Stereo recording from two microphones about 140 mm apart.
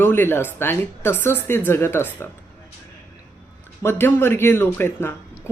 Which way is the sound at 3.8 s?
15° left (ahead or behind).